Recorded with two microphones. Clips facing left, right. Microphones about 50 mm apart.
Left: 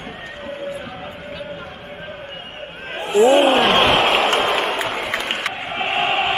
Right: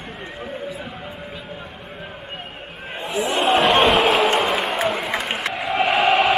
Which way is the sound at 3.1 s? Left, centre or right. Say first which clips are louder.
Left 11 dB; left.